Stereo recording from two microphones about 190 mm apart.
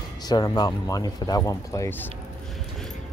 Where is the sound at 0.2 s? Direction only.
20° left (ahead or behind).